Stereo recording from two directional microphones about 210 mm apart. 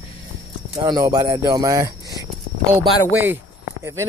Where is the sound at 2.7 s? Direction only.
5° right (ahead or behind).